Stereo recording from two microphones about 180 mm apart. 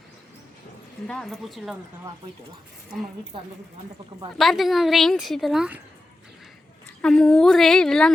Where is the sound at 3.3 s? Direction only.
30° right (ahead or behind).